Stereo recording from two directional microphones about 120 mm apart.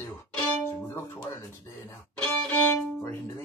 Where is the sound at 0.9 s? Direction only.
20° left (ahead or behind).